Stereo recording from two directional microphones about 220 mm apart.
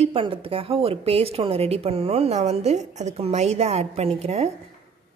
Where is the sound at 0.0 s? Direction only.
25° right (ahead or behind).